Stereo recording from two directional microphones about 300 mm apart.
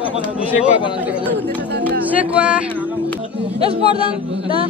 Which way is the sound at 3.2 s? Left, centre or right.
Centre.